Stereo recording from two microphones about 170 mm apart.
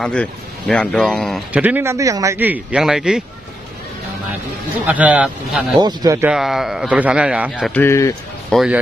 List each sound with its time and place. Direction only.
0.0 s speech: 5° left (ahead or behind)
1.5 s a man's voice: 10° right (ahead or behind)
4.8 s a man's voice: 10° right (ahead or behind)
5.8 s speech: 20° right (ahead or behind)
6.2 s a man's voice: centre (ahead or behind)
7.7 s speech: 15° left (ahead or behind)
8.5 s a man's voice: centre (ahead or behind)